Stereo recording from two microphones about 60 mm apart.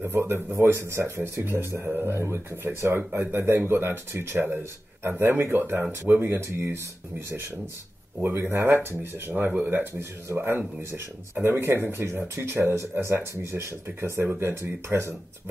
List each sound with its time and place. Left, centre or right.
0.0 s speech: right
1.9 s speech: right
2.1 s speech: right
8.4 s speech: right